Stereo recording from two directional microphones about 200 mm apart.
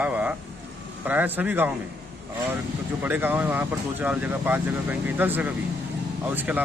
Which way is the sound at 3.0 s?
10° right (ahead or behind).